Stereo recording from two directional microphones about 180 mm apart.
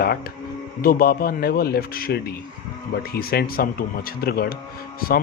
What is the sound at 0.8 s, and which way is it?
Speech, 55° left (ahead or behind).